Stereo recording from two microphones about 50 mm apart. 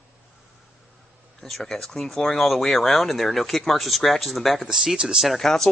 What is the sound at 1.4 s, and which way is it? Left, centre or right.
Speech, centre.